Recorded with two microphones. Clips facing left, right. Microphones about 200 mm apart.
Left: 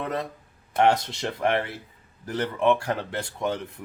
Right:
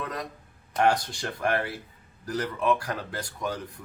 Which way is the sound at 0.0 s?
25° left (ahead or behind).